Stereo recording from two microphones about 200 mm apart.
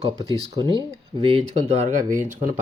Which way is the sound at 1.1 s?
30° right (ahead or behind).